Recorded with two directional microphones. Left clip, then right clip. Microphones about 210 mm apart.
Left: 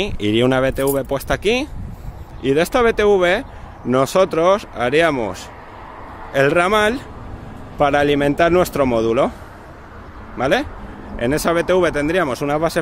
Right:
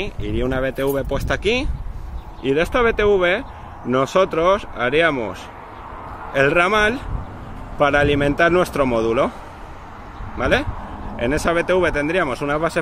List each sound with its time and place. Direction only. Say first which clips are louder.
0.0 s speech: left 7 dB; 50° left (ahead or behind)
0.5 s speech: left 5 dB; 30° left (ahead or behind)
0.8 s a man's voice: left 2 dB; 20° left (ahead or behind)
10.3 s a man's voice: left 1 dB; 15° left (ahead or behind)